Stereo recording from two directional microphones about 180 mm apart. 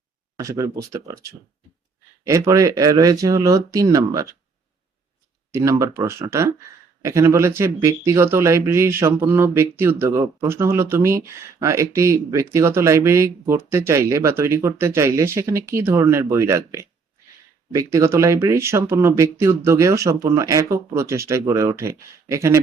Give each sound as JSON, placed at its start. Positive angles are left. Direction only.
{"t": 0.3, "sound": "speech", "side_deg": -20}
{"t": 5.5, "sound": "speech", "side_deg": -15}